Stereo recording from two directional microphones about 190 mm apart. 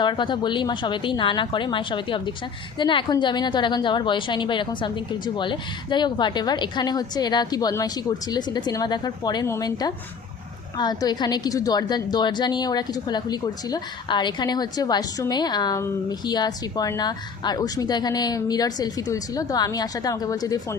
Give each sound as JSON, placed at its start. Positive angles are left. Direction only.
{"t": 0.0, "sound": "a woman's voice", "side_deg": 25}